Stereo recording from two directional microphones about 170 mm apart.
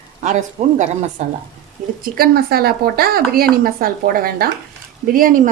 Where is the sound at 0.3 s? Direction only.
45° right (ahead or behind).